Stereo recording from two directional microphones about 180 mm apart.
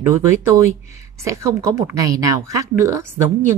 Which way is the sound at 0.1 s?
15° right (ahead or behind).